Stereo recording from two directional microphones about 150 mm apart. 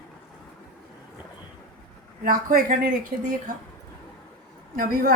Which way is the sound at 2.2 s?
70° right (ahead or behind).